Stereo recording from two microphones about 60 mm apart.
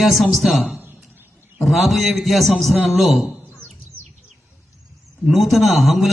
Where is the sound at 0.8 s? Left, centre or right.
Right.